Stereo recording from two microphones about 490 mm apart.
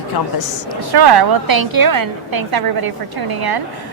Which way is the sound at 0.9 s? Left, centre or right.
Right.